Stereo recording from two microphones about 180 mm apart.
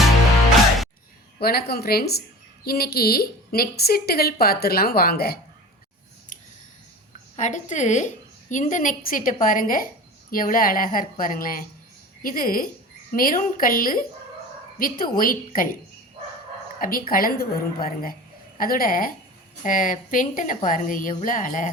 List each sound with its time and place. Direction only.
1.4 s a woman's voice: 60° left (ahead or behind)
7.3 s a woman's voice: 40° left (ahead or behind)
16.8 s a woman's voice: 50° left (ahead or behind)